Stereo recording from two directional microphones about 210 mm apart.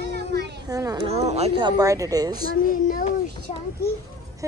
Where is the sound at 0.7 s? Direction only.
15° right (ahead or behind).